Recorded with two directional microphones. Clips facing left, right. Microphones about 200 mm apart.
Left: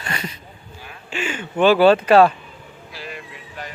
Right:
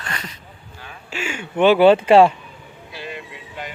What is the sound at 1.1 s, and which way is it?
Speech, 10° right (ahead or behind).